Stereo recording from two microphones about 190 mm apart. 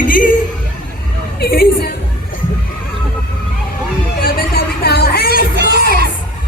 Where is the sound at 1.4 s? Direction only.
50° left (ahead or behind).